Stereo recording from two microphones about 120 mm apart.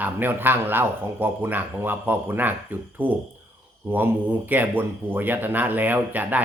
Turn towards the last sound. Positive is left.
turn(degrees=-15)  # may be behind; listen again after turning